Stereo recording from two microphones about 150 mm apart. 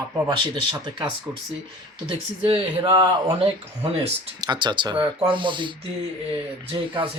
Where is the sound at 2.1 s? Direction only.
35° right (ahead or behind).